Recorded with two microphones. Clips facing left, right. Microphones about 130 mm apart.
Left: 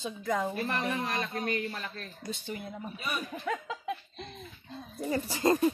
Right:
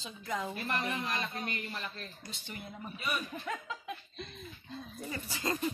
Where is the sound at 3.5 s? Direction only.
90° left.